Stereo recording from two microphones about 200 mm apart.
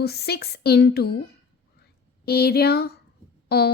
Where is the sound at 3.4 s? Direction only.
55° left (ahead or behind).